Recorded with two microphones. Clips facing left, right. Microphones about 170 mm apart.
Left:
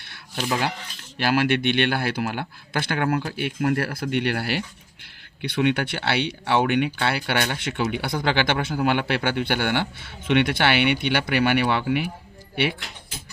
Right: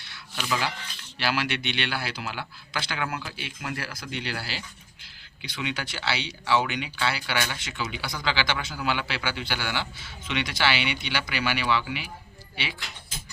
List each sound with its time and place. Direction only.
1.2 s speech: 50° left (ahead or behind)